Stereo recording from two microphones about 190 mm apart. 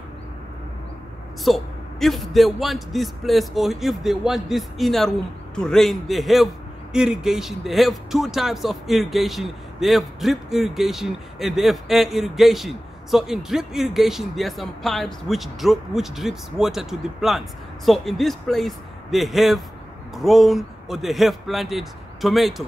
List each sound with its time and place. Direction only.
1.4 s a man's voice: centre (ahead or behind)